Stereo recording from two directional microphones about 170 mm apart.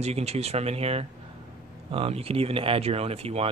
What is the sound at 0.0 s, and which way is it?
Speech, 40° right (ahead or behind).